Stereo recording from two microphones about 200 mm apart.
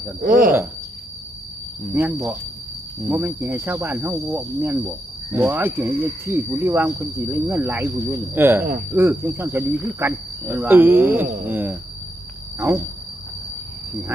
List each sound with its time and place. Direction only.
0.2 s speech: 45° right (ahead or behind)
1.9 s speech: 10° right (ahead or behind)